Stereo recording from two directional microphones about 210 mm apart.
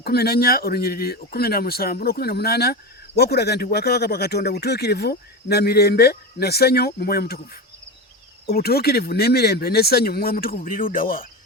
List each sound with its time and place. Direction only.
0.0 s speech: 50° left (ahead or behind)